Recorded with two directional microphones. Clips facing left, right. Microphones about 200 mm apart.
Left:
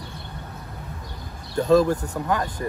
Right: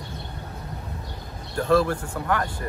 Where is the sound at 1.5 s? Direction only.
20° left (ahead or behind).